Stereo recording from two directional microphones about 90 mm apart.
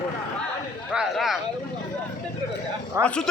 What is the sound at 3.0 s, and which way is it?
Speech, 10° left (ahead or behind).